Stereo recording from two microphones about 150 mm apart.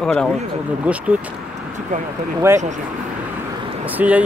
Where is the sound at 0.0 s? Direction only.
5° left (ahead or behind).